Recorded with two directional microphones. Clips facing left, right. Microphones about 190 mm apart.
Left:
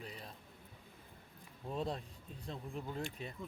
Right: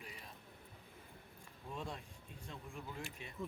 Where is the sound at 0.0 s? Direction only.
35° left (ahead or behind).